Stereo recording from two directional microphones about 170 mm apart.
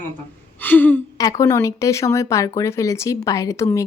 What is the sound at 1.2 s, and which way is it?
Speech, 20° left (ahead or behind).